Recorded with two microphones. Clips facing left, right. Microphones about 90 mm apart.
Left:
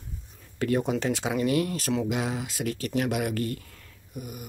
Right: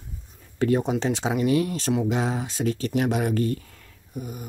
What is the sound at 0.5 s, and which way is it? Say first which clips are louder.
Speech: right 3 dB; 25° right (ahead or behind).